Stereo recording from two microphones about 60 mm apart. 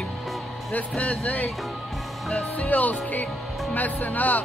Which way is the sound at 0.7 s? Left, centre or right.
Left.